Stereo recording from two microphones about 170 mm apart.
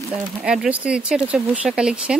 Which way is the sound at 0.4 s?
5° right (ahead or behind).